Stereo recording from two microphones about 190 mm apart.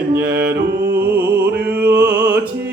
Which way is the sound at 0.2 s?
55° right (ahead or behind).